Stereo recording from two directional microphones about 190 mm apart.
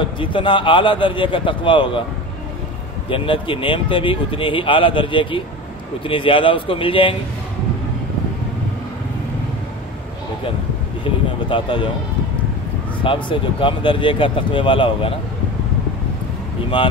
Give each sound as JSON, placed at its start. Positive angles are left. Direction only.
{"t": 0.2, "sound": "speech", "side_deg": 25}
{"t": 3.1, "sound": "speech", "side_deg": 25}
{"t": 11.1, "sound": "a sound", "side_deg": 25}
{"t": 13.0, "sound": "speech", "side_deg": 25}